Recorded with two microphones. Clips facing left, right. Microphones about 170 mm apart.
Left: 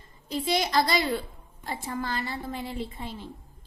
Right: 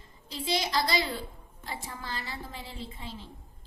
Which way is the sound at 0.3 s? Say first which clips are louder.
Left 4 dB; 50° left (ahead or behind).